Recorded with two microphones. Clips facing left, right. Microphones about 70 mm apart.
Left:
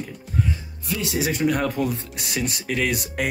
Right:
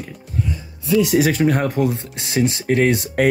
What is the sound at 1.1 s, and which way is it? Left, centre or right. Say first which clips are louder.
Speech: right 2 dB; right.